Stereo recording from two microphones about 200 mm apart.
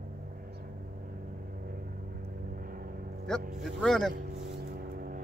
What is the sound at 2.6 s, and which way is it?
Vehicle, 45° right (ahead or behind).